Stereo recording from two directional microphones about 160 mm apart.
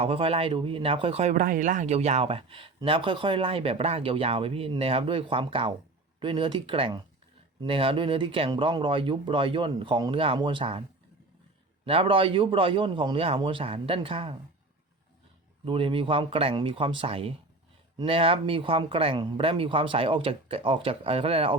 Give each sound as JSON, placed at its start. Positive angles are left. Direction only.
{"t": 0.0, "sound": "speech", "side_deg": -35}
{"t": 11.9, "sound": "speech", "side_deg": -35}
{"t": 15.6, "sound": "speech", "side_deg": -35}